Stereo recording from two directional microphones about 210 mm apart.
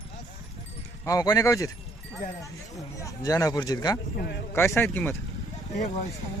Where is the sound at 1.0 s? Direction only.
15° left (ahead or behind).